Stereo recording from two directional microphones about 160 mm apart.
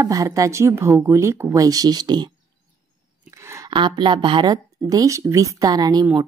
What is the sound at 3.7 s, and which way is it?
A woman's voice, 30° right (ahead or behind).